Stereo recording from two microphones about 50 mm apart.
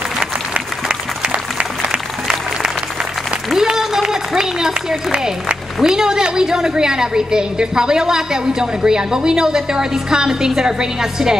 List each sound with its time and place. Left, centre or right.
1.3 s applause: right
3.5 s a sound: centre
5.2 s a woman's voice: centre